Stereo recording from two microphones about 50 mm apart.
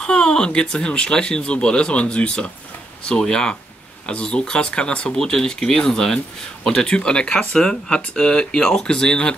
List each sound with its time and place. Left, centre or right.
0.0 s speech: centre